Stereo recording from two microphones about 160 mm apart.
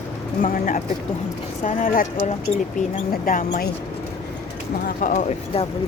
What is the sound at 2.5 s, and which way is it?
Speech, 45° left (ahead or behind).